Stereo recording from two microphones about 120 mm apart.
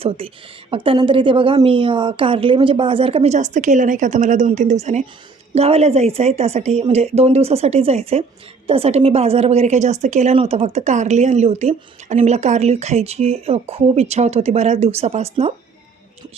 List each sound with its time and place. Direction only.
0.7 s a woman's voice: 45° right (ahead or behind)
3.3 s a woman's voice: 90° right; by 5.0 s 70° right (ahead or behind)
5.5 s speech: 60° right (ahead or behind); by 10.3 s 75° right (ahead or behind)
10.3 s speech: 60° right (ahead or behind)